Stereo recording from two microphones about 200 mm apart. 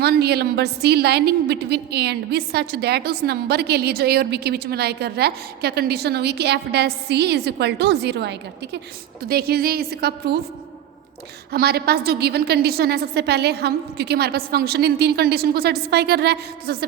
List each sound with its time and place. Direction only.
0.0 s a woman's voice: 55° right (ahead or behind)
11.5 s a woman's voice: 50° right (ahead or behind)